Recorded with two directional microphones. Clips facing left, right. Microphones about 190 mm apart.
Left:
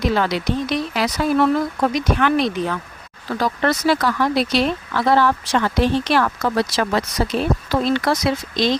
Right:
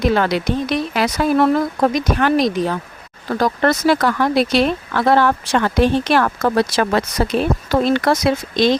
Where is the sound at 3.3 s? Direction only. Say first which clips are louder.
Right 3 dB; 50° right (ahead or behind).